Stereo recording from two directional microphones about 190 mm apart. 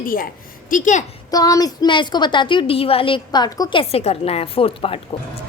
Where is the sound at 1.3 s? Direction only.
20° left (ahead or behind).